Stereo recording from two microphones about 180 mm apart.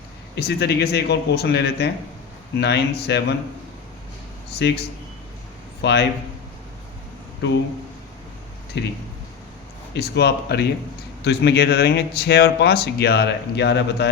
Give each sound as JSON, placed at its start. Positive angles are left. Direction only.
{"t": 0.3, "sound": "speech", "side_deg": 60}
{"t": 4.5, "sound": "speech", "side_deg": 65}
{"t": 5.8, "sound": "speech", "side_deg": 65}
{"t": 7.4, "sound": "speech", "side_deg": 70}
{"t": 8.7, "sound": "speech", "side_deg": 70}
{"t": 9.9, "sound": "speech", "side_deg": 65}